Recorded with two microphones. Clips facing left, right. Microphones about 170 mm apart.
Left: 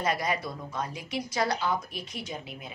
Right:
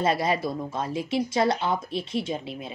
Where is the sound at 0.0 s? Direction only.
25° right (ahead or behind).